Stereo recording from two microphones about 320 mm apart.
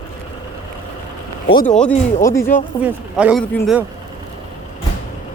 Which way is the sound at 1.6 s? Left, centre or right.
Centre.